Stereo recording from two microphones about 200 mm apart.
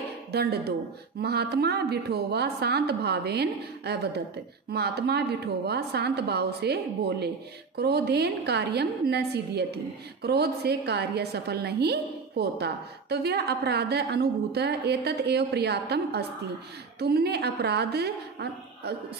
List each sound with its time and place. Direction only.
0.3 s a woman's voice: 55° right (ahead or behind)